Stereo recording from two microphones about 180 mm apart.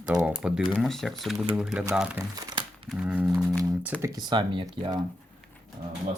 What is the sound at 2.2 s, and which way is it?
Crumpling, 25° right (ahead or behind).